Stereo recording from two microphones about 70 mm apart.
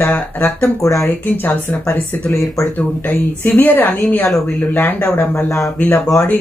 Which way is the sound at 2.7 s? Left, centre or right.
Left.